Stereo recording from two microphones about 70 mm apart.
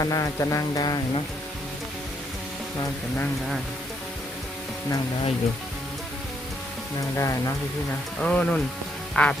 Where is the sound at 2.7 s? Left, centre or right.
Left.